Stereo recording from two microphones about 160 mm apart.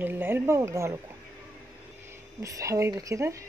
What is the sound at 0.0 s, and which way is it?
Speech, 10° right (ahead or behind).